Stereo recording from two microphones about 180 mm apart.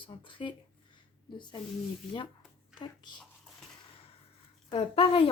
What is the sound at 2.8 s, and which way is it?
Speech, 25° left (ahead or behind).